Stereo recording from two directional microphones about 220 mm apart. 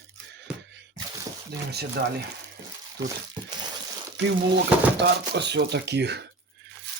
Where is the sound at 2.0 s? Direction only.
45° right (ahead or behind).